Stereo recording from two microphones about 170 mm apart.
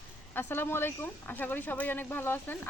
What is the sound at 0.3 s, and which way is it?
Speech, 15° left (ahead or behind).